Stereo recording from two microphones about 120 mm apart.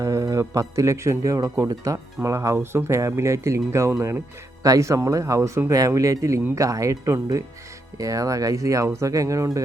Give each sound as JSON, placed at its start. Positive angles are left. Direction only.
{"t": 0.0, "sound": "a man's voice", "side_deg": -25}